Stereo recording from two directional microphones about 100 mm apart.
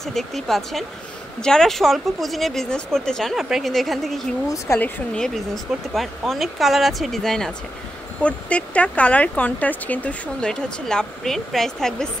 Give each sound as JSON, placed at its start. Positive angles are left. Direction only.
{"t": 0.0, "sound": "speech", "side_deg": 5}
{"t": 4.7, "sound": "speech", "side_deg": 15}
{"t": 5.2, "sound": "speech", "side_deg": 0}